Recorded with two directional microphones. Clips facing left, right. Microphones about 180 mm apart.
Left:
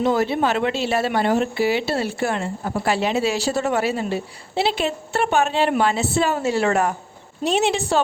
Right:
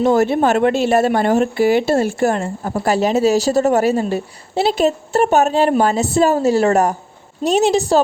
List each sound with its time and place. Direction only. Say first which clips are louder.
0.0 s a woman's voice: right 5 dB; 45° right (ahead or behind)